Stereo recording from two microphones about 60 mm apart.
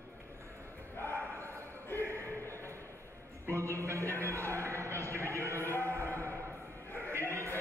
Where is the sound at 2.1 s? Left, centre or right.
Right.